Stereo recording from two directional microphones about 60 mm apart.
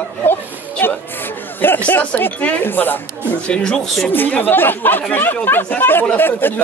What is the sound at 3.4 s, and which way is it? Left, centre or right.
Speech, centre.